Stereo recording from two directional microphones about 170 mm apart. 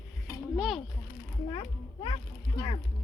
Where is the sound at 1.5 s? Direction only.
30° left (ahead or behind).